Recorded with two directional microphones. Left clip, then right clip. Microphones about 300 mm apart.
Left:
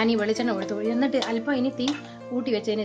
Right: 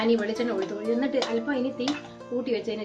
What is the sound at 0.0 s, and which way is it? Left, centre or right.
A woman's voice, left.